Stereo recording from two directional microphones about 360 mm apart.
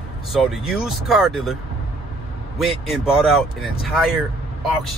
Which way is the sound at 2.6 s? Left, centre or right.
Centre.